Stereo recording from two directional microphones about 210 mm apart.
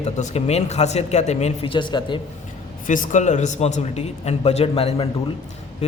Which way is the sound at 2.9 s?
35° left (ahead or behind).